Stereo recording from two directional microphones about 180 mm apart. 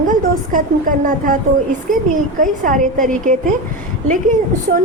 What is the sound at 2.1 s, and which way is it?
A woman's voice, 45° right (ahead or behind).